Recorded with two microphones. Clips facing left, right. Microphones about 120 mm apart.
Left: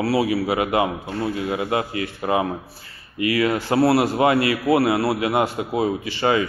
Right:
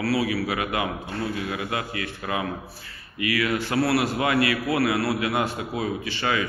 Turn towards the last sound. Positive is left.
turn(degrees=30)  # may be behind; listen again after turning